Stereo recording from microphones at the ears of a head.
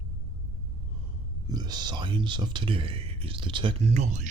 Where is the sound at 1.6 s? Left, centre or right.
Right.